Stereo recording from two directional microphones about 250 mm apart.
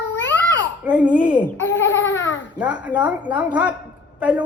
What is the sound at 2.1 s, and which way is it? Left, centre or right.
Speech, left.